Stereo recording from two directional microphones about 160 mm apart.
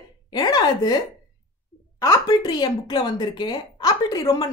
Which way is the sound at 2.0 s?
20° left (ahead or behind).